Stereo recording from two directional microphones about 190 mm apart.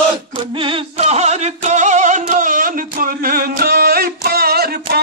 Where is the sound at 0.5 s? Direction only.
30° right (ahead or behind).